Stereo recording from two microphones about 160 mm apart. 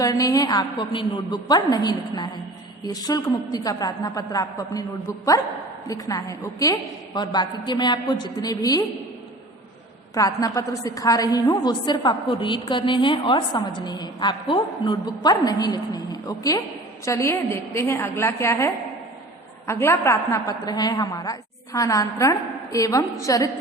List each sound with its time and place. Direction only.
0.0 s a woman's voice: 20° left (ahead or behind)
10.2 s a woman's voice: 20° left (ahead or behind)